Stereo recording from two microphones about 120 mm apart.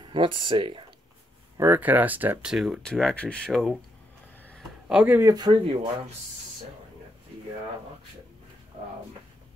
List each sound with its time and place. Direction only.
0.0 s speech: 45° right (ahead or behind)
1.6 s speech: 15° right (ahead or behind)
2.5 s speech: 5° right (ahead or behind)
4.8 s speech: 5° right (ahead or behind)
5.3 s speech: 40° right (ahead or behind)
8.7 s a sound: 50° right (ahead or behind)